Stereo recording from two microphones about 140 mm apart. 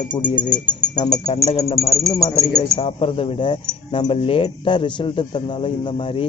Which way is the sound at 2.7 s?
40° left (ahead or behind).